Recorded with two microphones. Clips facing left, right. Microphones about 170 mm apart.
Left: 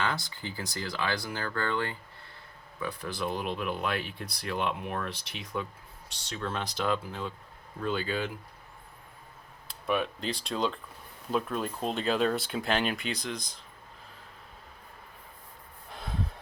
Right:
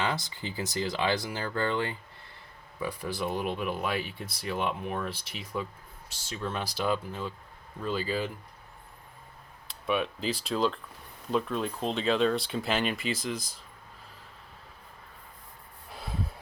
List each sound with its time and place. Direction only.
0.0 s speech: 15° right (ahead or behind)
2.8 s speech: 5° right (ahead or behind)
9.6 s speech: centre (ahead or behind)
15.9 s a sound: 5° right (ahead or behind)